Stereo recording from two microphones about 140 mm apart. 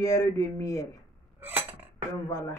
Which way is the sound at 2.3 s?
25° left (ahead or behind).